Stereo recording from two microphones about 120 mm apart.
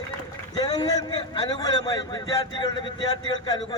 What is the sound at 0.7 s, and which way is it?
A man's voice, 35° left (ahead or behind).